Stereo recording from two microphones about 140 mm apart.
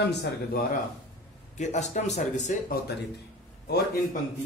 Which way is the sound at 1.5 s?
55° left (ahead or behind).